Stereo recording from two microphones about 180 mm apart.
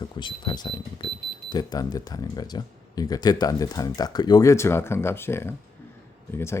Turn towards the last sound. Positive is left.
turn(degrees=15)  # may be behind; listen again after turning